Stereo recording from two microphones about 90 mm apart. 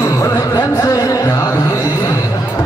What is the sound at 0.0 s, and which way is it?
Music, 35° left (ahead or behind).